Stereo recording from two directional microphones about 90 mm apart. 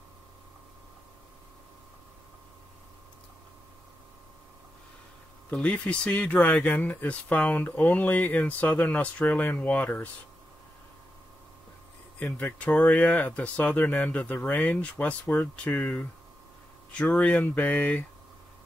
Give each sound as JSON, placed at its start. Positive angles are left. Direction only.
{"t": 5.5, "sound": "speech", "side_deg": 15}
{"t": 12.2, "sound": "speech", "side_deg": 20}